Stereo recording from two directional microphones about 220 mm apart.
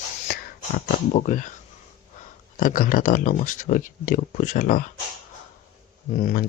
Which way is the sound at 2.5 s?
40° left (ahead or behind).